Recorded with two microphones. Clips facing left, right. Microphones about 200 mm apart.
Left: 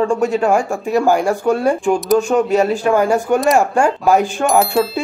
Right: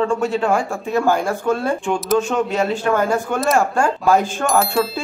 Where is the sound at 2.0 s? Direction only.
Centre (ahead or behind).